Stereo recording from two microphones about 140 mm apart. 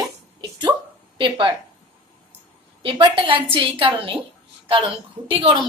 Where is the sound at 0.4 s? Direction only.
35° right (ahead or behind).